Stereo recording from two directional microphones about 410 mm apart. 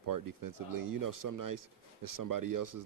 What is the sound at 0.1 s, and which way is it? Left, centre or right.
A man's voice, right.